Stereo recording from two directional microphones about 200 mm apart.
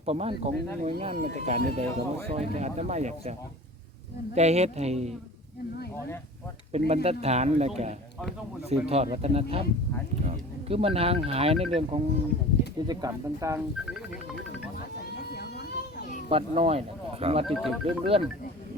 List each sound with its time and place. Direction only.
0.0 s speech: 30° right (ahead or behind)
4.4 s speech: 35° right (ahead or behind)
6.7 s speech: 30° right (ahead or behind)
8.7 s speech: 30° right (ahead or behind)
12.9 s speech: 15° right (ahead or behind)
14.8 s children playing: 55° left (ahead or behind)
16.3 s speech: 30° right (ahead or behind)
17.4 s speech: centre (ahead or behind)
17.8 s speech: 30° right (ahead or behind)